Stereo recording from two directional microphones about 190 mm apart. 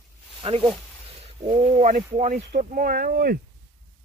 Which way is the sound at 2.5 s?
50° right (ahead or behind).